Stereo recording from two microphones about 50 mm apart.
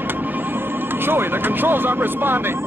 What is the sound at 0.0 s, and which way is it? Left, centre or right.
Speech, right.